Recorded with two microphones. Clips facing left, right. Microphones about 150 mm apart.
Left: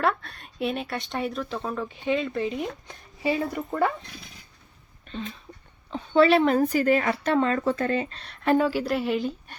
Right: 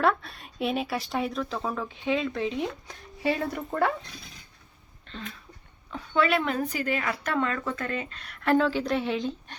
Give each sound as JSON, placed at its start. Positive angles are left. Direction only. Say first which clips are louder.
{"t": 0.0, "sound": "speech", "louder": "right 1 dB", "side_deg": 0}
{"t": 5.0, "sound": "a sound", "louder": "left 5 dB", "side_deg": 20}
{"t": 5.9, "sound": "a woman's voice", "louder": "left 6 dB", "side_deg": 30}
{"t": 8.5, "sound": "a woman's voice", "louder": "even", "side_deg": 10}